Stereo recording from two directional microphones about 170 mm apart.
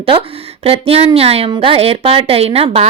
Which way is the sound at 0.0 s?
35° right (ahead or behind).